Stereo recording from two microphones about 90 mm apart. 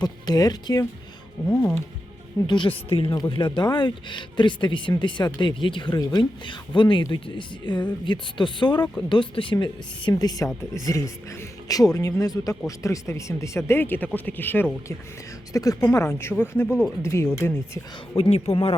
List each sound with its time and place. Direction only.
0.0 s speech: 45° left (ahead or behind)
2.5 s a woman's voice: 70° left (ahead or behind)
3.2 s speech: 60° left (ahead or behind)
10.1 s speech: 45° left (ahead or behind); by 14.9 s 25° left (ahead or behind)
15.5 s speech: 40° left (ahead or behind); by 16.6 s 25° left (ahead or behind)
16.6 s speech: 10° right (ahead or behind)
17.0 s speech: 30° left (ahead or behind)
18.2 s speech: 90° left